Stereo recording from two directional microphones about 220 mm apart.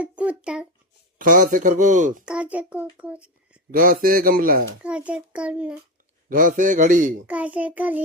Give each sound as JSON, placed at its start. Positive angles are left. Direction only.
{"t": 0.0, "sound": "a sound", "side_deg": -5}
{"t": 1.2, "sound": "speech", "side_deg": -35}
{"t": 2.2, "sound": "a child's voice", "side_deg": -5}
{"t": 3.7, "sound": "speech", "side_deg": -40}
{"t": 4.8, "sound": "a child's voice", "side_deg": -5}
{"t": 6.2, "sound": "speech", "side_deg": -40}
{"t": 7.3, "sound": "child singing", "side_deg": -5}